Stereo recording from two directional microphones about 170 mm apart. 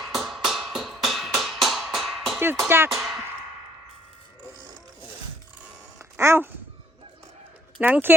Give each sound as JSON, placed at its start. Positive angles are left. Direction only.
{"t": 0.0, "sound": "music", "side_deg": 0}
{"t": 2.4, "sound": "speech", "side_deg": -15}
{"t": 2.9, "sound": "speech", "side_deg": 0}
{"t": 6.1, "sound": "a sound", "side_deg": -15}
{"t": 7.8, "sound": "speech", "side_deg": -10}